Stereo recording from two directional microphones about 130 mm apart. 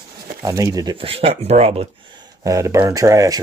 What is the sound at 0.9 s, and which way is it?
Speech, 45° right (ahead or behind).